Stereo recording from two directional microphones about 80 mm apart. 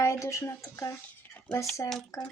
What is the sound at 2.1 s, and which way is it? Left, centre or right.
Speech, left.